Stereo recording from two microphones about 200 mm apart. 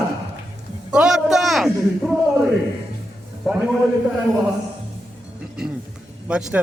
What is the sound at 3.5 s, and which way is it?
Speech, centre (ahead or behind).